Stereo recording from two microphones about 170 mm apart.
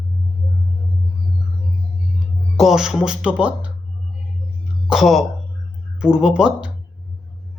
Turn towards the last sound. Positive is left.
turn(degrees=-5)  # may be behind; listen again after turning